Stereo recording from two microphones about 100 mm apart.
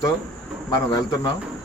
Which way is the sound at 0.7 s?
40° left (ahead or behind).